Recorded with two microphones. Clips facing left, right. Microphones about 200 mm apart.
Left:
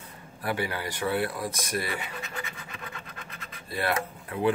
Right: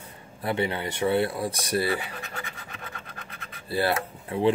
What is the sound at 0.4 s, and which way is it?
Speech, 25° right (ahead or behind).